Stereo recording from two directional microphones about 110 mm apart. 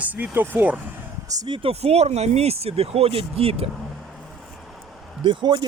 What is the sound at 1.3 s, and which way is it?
Speech, 35° right (ahead or behind).